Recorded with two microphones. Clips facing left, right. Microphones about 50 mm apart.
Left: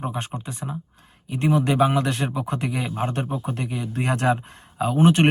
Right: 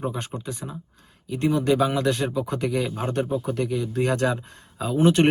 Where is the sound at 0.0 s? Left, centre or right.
Left.